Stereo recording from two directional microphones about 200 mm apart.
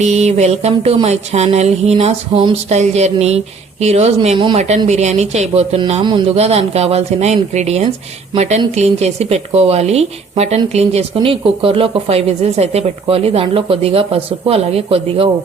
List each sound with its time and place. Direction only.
0.0 s speech: 35° right (ahead or behind)